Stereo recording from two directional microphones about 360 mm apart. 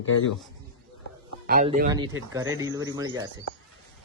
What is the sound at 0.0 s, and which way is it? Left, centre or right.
Speech, left.